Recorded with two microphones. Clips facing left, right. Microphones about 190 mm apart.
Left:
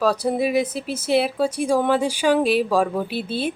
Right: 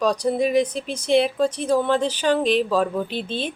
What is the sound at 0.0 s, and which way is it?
Speech, 5° left (ahead or behind).